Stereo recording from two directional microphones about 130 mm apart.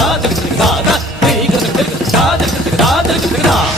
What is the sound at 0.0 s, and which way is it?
Music, centre (ahead or behind).